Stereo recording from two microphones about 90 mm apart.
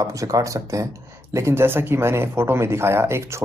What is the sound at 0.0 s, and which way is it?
Speech, 35° right (ahead or behind).